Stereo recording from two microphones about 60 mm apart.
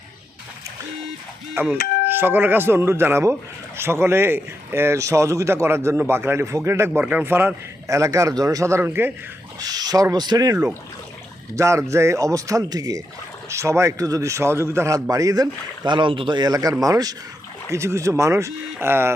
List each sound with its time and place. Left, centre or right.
1.6 s speech: right
5.6 s speech: right
7.0 s speech: right
7.9 s a man's voice: right
8.8 s speech: right
9.6 s speech: right
11.5 s a man's voice: right
13.5 s a man's voice: right
15.1 s speech: right
16.5 s speech: right
17.7 s a man's voice: right
18.9 s speech: right